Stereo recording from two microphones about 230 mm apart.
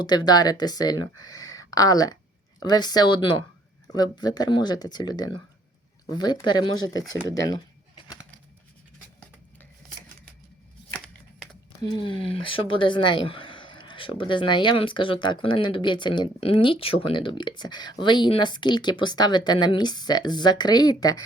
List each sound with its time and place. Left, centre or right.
0.0 s speech: centre
1.4 s a sound: centre
2.6 s speech: centre
7.3 s typing: centre
10.9 s shuffling cards: centre
11.8 s speech: centre